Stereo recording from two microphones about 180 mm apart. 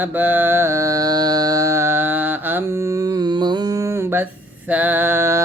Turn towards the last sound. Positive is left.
turn(degrees=-15)  # may be behind; listen again after turning